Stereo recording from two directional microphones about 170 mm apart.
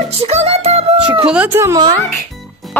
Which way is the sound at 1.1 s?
5° right (ahead or behind).